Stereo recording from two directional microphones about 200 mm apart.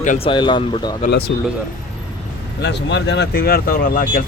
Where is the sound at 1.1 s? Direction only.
55° left (ahead or behind).